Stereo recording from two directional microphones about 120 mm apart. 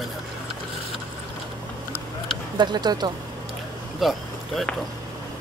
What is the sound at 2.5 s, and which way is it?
Speech, 35° right (ahead or behind).